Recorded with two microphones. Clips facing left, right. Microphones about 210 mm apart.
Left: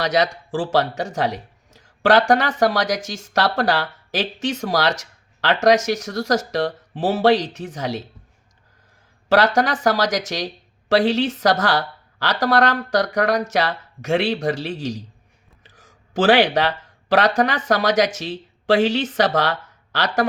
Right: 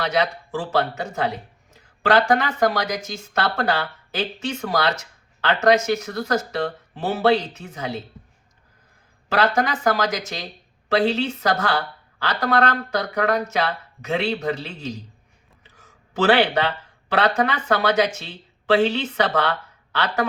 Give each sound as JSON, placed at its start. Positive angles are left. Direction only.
{"t": 0.0, "sound": "speech", "side_deg": 90}
{"t": 9.3, "sound": "a man's voice", "side_deg": 90}
{"t": 16.2, "sound": "speech", "side_deg": 90}